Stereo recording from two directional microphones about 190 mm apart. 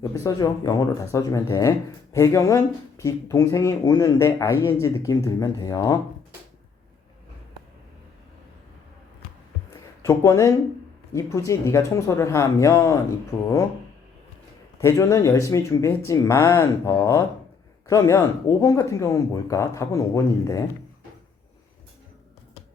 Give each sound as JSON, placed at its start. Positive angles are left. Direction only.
{"t": 0.0, "sound": "speech", "side_deg": 20}
{"t": 10.0, "sound": "speech", "side_deg": 15}
{"t": 14.8, "sound": "speech", "side_deg": 15}